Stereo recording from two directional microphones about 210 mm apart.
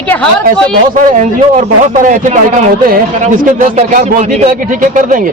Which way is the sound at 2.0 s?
35° right (ahead or behind).